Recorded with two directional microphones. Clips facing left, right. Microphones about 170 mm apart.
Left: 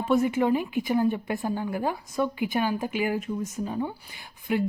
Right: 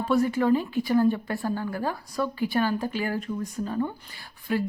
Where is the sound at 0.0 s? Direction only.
20° left (ahead or behind).